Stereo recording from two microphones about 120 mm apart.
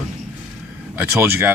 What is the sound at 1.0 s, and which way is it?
Speech, 15° right (ahead or behind).